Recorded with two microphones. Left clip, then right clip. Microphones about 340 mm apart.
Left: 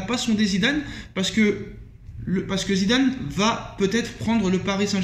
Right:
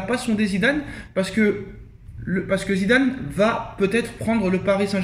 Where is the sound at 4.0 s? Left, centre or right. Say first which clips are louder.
Right 2 dB; right.